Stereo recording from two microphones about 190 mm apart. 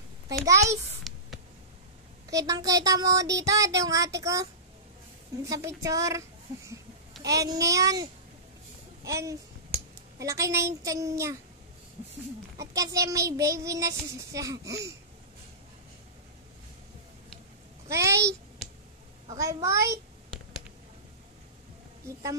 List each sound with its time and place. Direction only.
0.5 s child singing: 15° right (ahead or behind)
1.1 s a sound: centre (ahead or behind)
2.3 s child singing: 20° right (ahead or behind)
12.5 s child singing: 20° right (ahead or behind)
17.8 s child singing: 15° right (ahead or behind)
19.2 s child singing: 15° right (ahead or behind)